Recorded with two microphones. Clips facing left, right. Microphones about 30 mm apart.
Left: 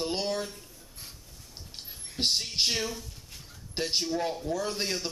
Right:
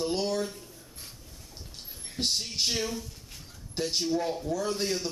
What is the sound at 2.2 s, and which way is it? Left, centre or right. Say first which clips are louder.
Speech: left 2 dB; centre.